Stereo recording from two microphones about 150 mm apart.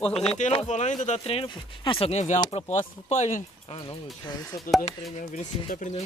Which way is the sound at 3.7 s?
35° left (ahead or behind).